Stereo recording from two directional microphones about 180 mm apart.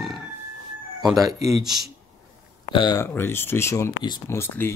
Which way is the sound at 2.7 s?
25° left (ahead or behind).